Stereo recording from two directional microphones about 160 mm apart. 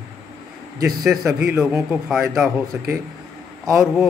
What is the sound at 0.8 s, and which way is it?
A man's voice, centre (ahead or behind).